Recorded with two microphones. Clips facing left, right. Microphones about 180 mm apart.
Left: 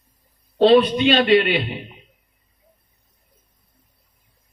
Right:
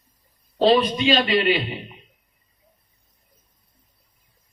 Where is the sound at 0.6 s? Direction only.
60° left (ahead or behind).